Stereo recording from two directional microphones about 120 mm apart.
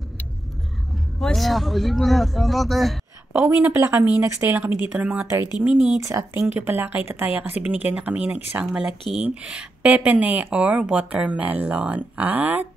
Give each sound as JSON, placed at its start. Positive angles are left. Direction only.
{"t": 1.2, "sound": "speech", "side_deg": 0}
{"t": 3.3, "sound": "speech", "side_deg": -20}
{"t": 6.0, "sound": "speech", "side_deg": -25}